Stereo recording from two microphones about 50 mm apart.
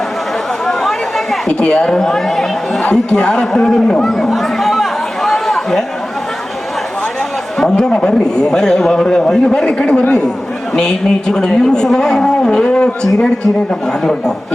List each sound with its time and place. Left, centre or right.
0.6 s chatter: centre
1.5 s a man's voice: centre
2.9 s speech: centre
4.3 s chatter: centre
7.6 s speech: centre
10.0 s speech: left
10.8 s speech: centre